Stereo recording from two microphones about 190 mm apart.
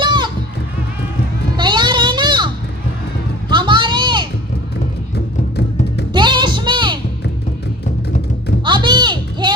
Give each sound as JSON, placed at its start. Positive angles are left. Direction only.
{"t": 0.0, "sound": "music", "side_deg": -25}
{"t": 1.5, "sound": "music", "side_deg": -25}
{"t": 3.5, "sound": "a sound", "side_deg": -25}
{"t": 5.1, "sound": "music", "side_deg": 60}
{"t": 6.1, "sound": "music", "side_deg": -25}
{"t": 8.6, "sound": "a sound", "side_deg": -25}